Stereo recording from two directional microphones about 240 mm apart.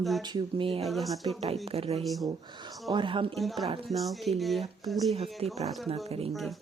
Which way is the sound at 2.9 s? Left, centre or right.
Right.